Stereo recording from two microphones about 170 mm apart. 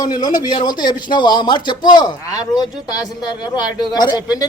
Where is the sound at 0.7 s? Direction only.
25° left (ahead or behind).